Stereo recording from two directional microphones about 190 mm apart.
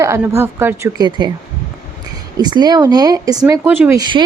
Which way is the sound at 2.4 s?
20° right (ahead or behind).